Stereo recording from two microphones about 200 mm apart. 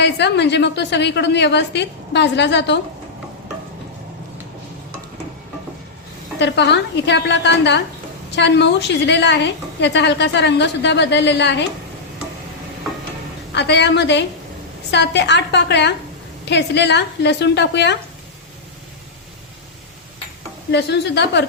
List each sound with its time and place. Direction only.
0.0 s a woman's voice: 60° left (ahead or behind)
6.4 s a woman's voice: 60° left (ahead or behind)
13.5 s a woman's voice: 60° left (ahead or behind)
20.7 s a woman's voice: 60° left (ahead or behind)